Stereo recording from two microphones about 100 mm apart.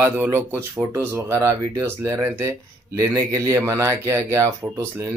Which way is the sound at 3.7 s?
30° right (ahead or behind).